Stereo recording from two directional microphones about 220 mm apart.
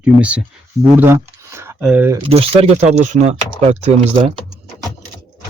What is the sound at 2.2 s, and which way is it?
Speech, 25° right (ahead or behind).